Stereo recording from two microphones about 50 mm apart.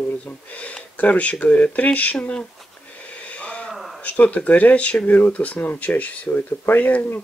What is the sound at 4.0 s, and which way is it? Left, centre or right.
Speech, left.